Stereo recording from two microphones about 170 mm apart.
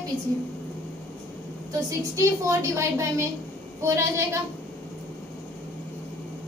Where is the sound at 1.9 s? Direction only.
20° right (ahead or behind).